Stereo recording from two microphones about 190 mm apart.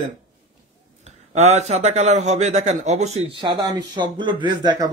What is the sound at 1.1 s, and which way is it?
A man's voice, 35° right (ahead or behind).